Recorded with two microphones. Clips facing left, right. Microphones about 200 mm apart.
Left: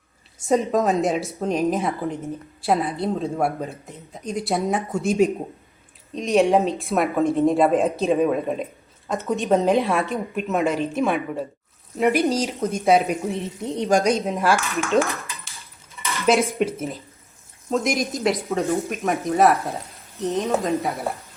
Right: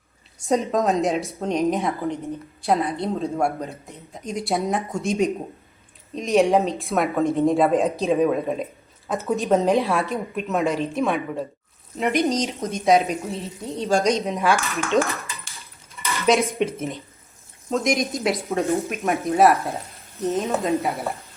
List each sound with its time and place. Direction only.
0.3 s a woman's voice: centre (ahead or behind)
13.3 s speech: 15° left (ahead or behind)
14.2 s a woman's voice: centre (ahead or behind)
17.7 s a woman's voice: centre (ahead or behind)